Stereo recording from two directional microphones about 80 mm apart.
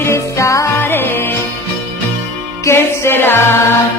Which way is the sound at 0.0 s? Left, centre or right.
Left.